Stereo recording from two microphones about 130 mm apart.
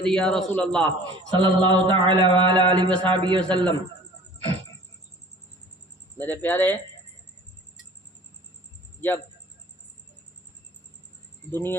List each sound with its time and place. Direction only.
0.0 s a man's voice: 5° left (ahead or behind)
1.4 s a sound: 40° right (ahead or behind)
2.9 s speech: 10° left (ahead or behind)
3.2 s a sound: 35° right (ahead or behind)
6.1 s speech: 15° left (ahead or behind)
9.0 s speech: 15° left (ahead or behind)
11.5 s speech: 15° left (ahead or behind)